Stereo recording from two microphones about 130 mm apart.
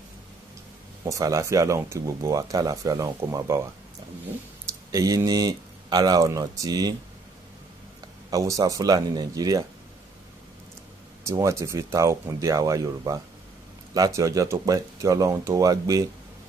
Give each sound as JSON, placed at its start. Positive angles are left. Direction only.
{"t": 1.0, "sound": "speech", "side_deg": -25}
{"t": 4.9, "sound": "speech", "side_deg": -25}
{"t": 8.3, "sound": "speech", "side_deg": -25}
{"t": 11.2, "sound": "speech", "side_deg": -25}